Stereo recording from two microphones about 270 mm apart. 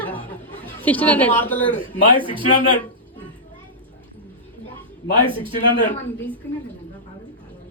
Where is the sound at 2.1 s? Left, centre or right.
Centre.